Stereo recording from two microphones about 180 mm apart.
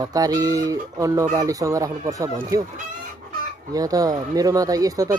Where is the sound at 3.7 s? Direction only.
20° right (ahead or behind).